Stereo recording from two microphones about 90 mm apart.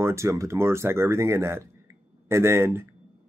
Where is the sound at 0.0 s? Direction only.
30° right (ahead or behind).